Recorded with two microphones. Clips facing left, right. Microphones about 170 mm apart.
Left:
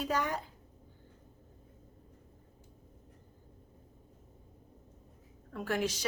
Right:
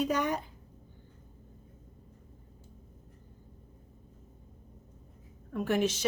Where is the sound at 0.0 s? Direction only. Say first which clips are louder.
Right 4 dB; 20° right (ahead or behind).